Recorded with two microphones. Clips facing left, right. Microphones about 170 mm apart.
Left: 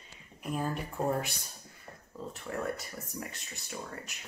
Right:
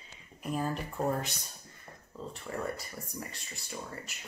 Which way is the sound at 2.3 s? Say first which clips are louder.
Left 1 dB; centre (ahead or behind).